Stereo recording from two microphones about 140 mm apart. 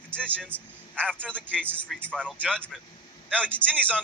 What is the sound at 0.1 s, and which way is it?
A man's voice, 10° left (ahead or behind).